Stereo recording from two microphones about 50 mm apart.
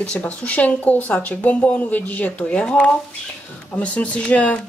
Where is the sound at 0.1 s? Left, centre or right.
Left.